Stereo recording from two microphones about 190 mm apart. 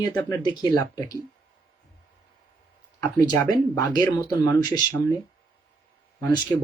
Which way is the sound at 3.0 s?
20° left (ahead or behind).